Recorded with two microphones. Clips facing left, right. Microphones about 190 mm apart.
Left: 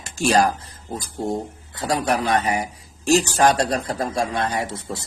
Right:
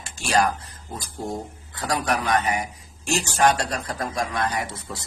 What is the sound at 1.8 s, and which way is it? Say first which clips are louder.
Speech: left 3 dB; 25° left (ahead or behind).